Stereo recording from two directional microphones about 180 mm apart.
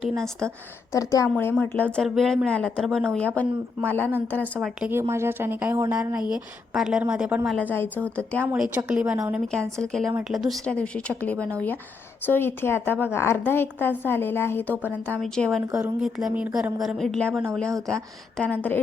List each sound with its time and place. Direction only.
0.0 s a woman's voice: centre (ahead or behind)
0.9 s a woman's voice: 20° left (ahead or behind)
4.6 s speech: 10° right (ahead or behind)
7.6 s a woman's voice: 10° left (ahead or behind)
8.5 s a woman's voice: 5° right (ahead or behind)